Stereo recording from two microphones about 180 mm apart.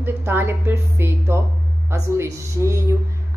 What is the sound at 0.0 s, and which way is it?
A woman's voice, 10° right (ahead or behind).